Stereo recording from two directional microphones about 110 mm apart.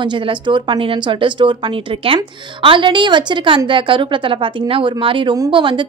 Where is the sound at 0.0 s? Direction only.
45° right (ahead or behind).